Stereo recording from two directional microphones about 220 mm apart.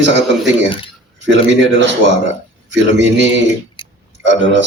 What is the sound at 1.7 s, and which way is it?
Speech, 55° right (ahead or behind).